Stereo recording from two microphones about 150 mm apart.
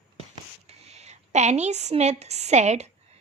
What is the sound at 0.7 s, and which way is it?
A woman's voice, 45° right (ahead or behind).